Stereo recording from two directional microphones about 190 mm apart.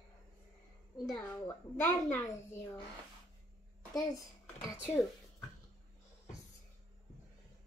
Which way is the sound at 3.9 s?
15° left (ahead or behind).